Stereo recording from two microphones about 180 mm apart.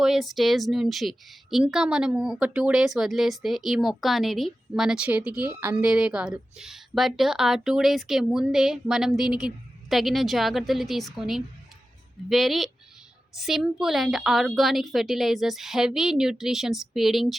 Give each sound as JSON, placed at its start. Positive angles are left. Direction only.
{"t": 0.0, "sound": "a woman's voice", "side_deg": 0}